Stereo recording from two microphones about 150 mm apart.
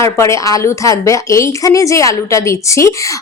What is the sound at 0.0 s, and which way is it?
A woman's voice, 20° left (ahead or behind).